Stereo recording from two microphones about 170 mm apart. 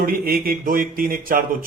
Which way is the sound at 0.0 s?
60° right (ahead or behind).